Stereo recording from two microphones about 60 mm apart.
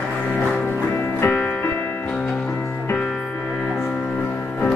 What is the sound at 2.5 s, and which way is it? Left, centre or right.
Music, left.